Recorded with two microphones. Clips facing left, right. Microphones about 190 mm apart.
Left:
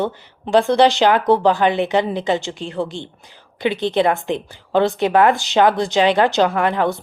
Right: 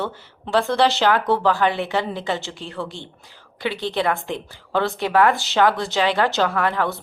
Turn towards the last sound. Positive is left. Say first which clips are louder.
# left 4 dB
turn(degrees=20)  # may be behind; listen again after turning